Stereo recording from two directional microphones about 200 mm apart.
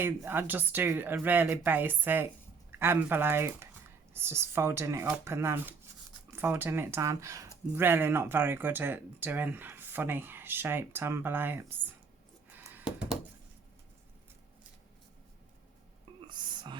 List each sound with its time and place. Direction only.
0.0 s speech: 10° right (ahead or behind)
12.5 s a sound: 10° right (ahead or behind)
16.3 s whispering: 20° right (ahead or behind)